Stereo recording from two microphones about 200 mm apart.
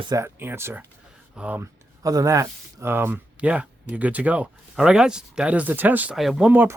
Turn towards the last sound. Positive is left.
turn(degrees=-10)  # may be behind; listen again after turning